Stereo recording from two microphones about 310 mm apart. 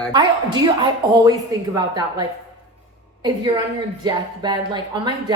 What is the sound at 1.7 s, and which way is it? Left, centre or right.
Speech, centre.